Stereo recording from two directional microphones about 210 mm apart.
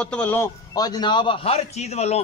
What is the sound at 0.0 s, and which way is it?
A man's voice, 5° left (ahead or behind).